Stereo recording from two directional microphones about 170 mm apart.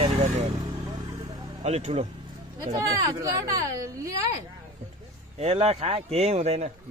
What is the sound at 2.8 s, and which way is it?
Speech, 20° right (ahead or behind).